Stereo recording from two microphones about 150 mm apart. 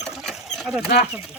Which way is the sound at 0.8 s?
90° left.